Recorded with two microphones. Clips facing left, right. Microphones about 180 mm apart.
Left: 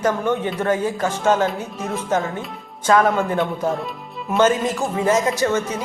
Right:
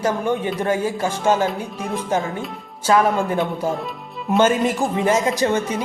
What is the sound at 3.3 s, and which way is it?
Speech, 10° right (ahead or behind).